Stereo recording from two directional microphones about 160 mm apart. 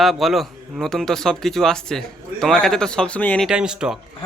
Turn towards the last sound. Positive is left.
turn(degrees=-5)  # may be behind; listen again after turning